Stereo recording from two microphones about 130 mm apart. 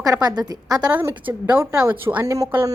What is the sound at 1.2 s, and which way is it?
A woman's voice, 10° right (ahead or behind).